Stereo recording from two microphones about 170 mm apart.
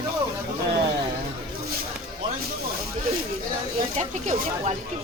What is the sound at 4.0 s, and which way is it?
Speech, 40° right (ahead or behind).